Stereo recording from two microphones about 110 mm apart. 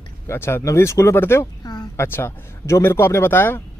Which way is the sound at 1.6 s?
35° left (ahead or behind).